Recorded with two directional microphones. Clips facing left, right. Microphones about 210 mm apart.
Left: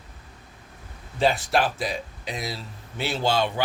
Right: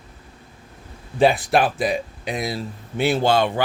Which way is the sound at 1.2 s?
55° right (ahead or behind).